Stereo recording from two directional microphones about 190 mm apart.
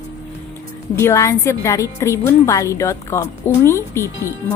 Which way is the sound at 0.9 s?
15° left (ahead or behind).